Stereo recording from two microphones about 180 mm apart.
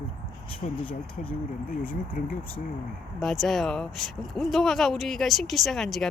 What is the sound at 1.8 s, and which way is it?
Speech, 50° left (ahead or behind).